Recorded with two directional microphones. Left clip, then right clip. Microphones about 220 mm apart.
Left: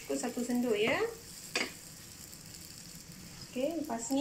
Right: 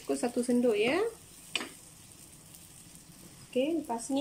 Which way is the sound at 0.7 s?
55° right (ahead or behind).